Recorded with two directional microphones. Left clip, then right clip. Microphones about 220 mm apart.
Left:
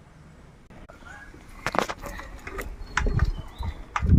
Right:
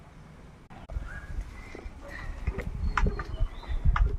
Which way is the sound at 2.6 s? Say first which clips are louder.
Left 2 dB; 50° left (ahead or behind).